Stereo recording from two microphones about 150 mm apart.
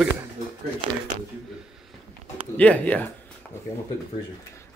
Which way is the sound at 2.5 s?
10° left (ahead or behind).